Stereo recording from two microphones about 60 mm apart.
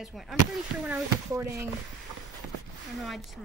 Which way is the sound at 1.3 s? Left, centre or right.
Right.